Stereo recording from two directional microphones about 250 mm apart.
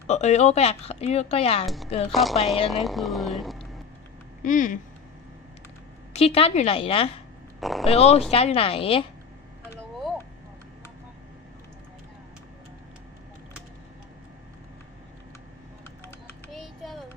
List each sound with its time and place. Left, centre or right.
0.1 s speech: left
1.6 s speech: centre
4.4 s speech: left
6.1 s speech: left
7.6 s speech: centre
7.9 s speech: left
16.5 s a sound: centre